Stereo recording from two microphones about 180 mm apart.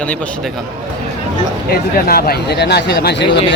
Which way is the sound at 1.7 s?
55° left (ahead or behind).